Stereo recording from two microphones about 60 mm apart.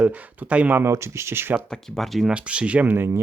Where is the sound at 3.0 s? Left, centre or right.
Right.